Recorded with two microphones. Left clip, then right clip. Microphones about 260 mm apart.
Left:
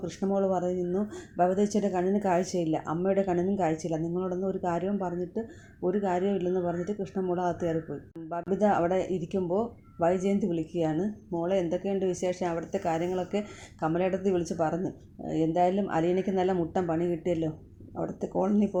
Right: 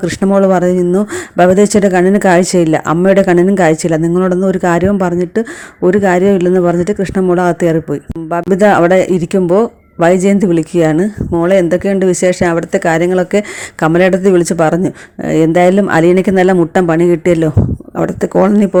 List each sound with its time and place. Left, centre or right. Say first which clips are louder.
0.0 s speech: right 18 dB; right